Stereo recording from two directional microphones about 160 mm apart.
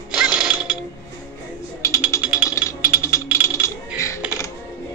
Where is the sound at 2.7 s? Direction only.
20° left (ahead or behind).